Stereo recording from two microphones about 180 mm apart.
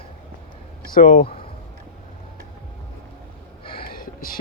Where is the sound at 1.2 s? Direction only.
30° left (ahead or behind).